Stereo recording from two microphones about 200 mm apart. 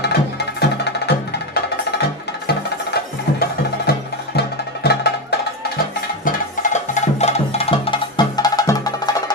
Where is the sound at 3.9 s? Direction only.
50° left (ahead or behind).